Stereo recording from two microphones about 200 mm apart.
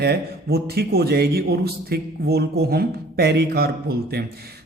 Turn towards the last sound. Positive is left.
turn(degrees=-50)  # may be behind; listen again after turning